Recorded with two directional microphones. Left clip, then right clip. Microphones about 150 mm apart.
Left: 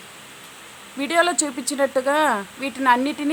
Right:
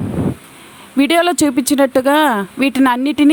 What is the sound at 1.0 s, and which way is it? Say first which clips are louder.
Speech: right 7 dB; 60° right (ahead or behind).